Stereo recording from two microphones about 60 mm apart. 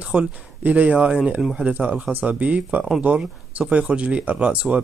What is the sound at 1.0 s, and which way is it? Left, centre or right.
Speech, centre.